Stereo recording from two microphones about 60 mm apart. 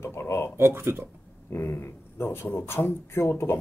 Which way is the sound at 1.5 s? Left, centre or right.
Left.